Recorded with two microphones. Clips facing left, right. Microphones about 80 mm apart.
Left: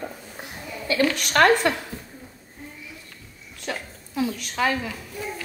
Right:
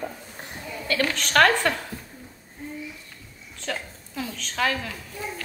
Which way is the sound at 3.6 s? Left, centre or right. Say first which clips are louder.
Even; centre.